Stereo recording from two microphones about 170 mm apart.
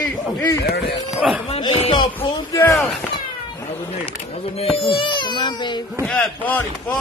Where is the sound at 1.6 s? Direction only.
30° left (ahead or behind).